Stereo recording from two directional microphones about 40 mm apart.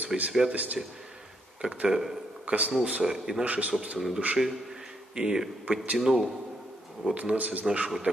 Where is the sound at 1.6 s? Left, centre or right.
Right.